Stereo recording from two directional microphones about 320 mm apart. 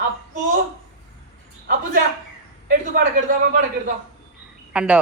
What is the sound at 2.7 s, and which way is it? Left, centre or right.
Speech, right.